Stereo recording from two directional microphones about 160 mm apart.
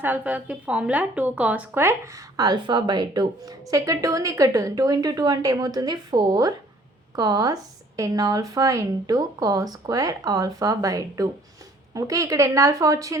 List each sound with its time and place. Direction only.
0.0 s a woman's voice: 10° right (ahead or behind)
2.3 s a woman's voice: 25° right (ahead or behind)